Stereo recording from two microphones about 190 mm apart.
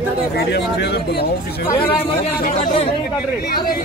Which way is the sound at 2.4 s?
35° left (ahead or behind).